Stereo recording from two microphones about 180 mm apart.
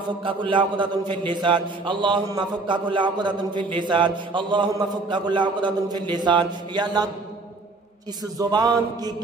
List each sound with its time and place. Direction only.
0.2 s a man's voice: 30° right (ahead or behind)
8.4 s a man's voice: 25° right (ahead or behind)